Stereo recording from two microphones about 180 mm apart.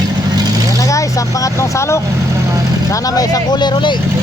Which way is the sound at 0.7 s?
20° left (ahead or behind).